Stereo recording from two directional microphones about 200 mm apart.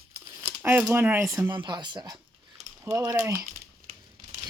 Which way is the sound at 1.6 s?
20° right (ahead or behind).